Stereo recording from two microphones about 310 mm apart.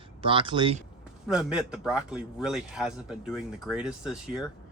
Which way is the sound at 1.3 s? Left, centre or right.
Centre.